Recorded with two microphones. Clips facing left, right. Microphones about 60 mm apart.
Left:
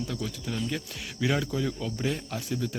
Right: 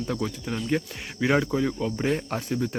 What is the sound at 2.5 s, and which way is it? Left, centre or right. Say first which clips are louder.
Speech: right 3 dB; right.